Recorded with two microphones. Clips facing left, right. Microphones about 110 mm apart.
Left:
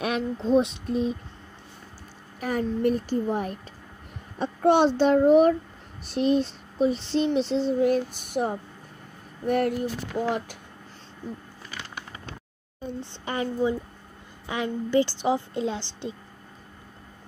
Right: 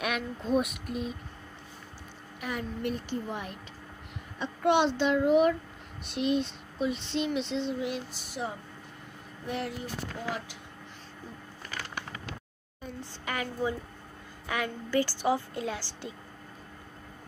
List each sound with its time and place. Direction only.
0.0 s child singing: 30° left (ahead or behind)
2.4 s child singing: 40° left (ahead or behind)
9.5 s speech: 55° left (ahead or behind)
13.0 s a woman's voice: 30° left (ahead or behind)